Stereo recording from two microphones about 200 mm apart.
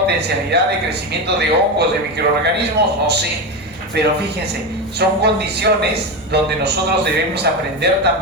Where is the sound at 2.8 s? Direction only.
55° right (ahead or behind).